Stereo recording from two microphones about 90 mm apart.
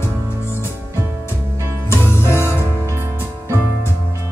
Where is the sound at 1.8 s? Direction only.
30° left (ahead or behind).